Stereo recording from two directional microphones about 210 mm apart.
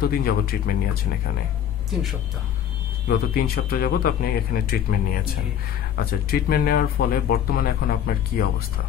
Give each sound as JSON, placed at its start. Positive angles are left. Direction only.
{"t": 0.0, "sound": "speech", "side_deg": 45}
{"t": 3.1, "sound": "speech", "side_deg": 45}